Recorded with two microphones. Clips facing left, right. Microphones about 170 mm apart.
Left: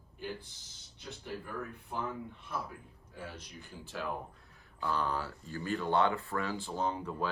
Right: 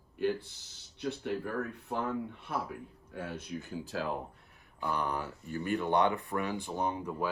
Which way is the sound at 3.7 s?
35° right (ahead or behind).